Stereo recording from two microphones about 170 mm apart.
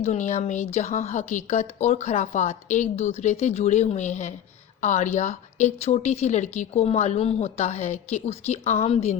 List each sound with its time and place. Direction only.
0.0 s a woman's voice: 40° left (ahead or behind)